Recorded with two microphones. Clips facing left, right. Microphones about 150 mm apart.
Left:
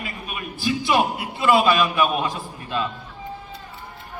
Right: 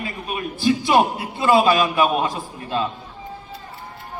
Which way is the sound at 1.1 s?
25° right (ahead or behind).